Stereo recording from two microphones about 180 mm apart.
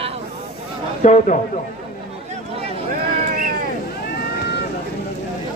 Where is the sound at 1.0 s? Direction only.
45° left (ahead or behind).